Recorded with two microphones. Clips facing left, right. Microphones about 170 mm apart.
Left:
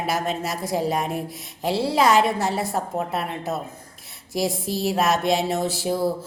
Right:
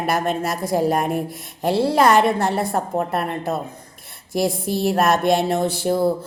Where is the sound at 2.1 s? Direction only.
55° right (ahead or behind).